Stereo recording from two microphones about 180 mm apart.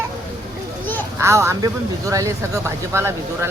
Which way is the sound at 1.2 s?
15° right (ahead or behind).